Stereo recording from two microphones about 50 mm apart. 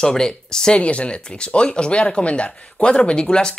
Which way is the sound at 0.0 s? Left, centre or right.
Centre.